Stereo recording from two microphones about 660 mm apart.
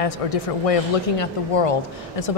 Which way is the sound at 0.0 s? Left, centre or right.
Left.